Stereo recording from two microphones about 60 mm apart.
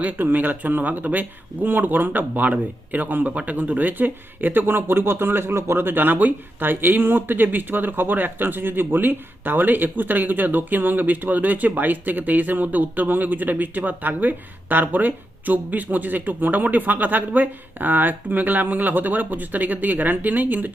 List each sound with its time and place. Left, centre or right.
0.0 s speech: right